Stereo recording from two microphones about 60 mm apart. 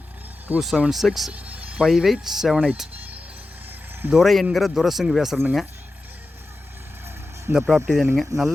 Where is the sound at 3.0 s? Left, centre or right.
Right.